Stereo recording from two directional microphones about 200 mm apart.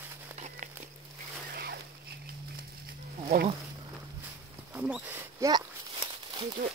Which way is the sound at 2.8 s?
50° right (ahead or behind).